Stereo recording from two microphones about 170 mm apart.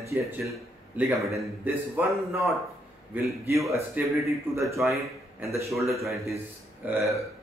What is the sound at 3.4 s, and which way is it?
Speech, 15° right (ahead or behind).